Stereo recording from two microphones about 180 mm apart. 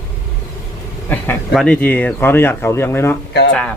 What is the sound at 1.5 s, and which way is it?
Speech, centre (ahead or behind).